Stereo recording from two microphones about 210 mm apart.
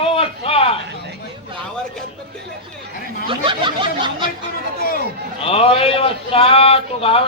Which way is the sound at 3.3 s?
25° right (ahead or behind).